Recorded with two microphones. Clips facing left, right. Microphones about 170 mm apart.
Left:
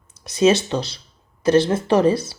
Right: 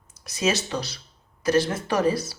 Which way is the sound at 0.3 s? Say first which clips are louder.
Left 9 dB; 30° left (ahead or behind).